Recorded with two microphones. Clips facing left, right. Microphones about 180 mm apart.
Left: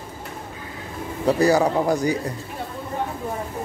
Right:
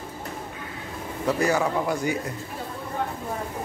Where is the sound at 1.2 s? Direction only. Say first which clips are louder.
Left 5 dB; 35° left (ahead or behind).